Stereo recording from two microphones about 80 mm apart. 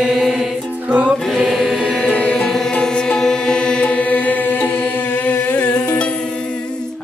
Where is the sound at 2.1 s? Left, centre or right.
Centre.